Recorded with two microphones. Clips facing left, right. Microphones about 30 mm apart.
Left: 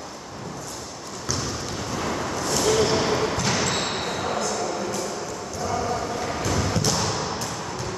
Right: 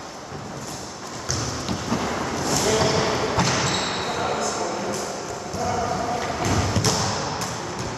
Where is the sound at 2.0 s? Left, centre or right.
Centre.